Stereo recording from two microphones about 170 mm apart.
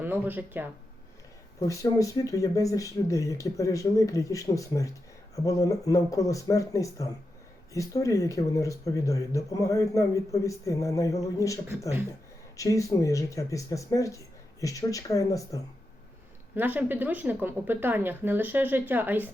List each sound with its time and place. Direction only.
0.0 s a woman's voice: 10° right (ahead or behind)
1.5 s speech: 20° left (ahead or behind)
16.6 s a woman's voice: 10° right (ahead or behind)